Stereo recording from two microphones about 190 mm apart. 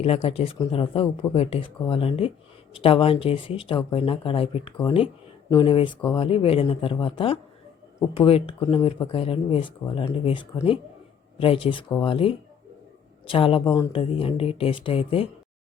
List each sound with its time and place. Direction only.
0.0 s speech: 30° left (ahead or behind)